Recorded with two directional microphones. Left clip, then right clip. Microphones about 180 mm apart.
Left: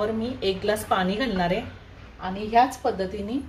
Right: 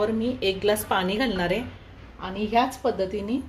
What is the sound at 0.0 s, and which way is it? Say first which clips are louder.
A woman's voice: right 1 dB; 50° right (ahead or behind).